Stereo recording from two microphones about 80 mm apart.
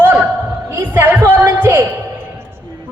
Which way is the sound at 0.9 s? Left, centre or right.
Right.